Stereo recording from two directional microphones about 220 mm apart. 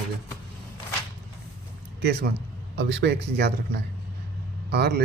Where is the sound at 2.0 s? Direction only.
45° right (ahead or behind).